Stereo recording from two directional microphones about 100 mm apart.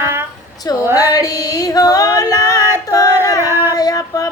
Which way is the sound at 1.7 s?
35° left (ahead or behind).